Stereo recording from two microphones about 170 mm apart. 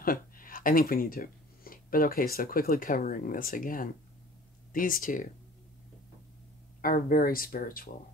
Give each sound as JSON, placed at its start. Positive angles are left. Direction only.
{"t": 0.0, "sound": "speech", "side_deg": 55}
{"t": 6.8, "sound": "speech", "side_deg": 55}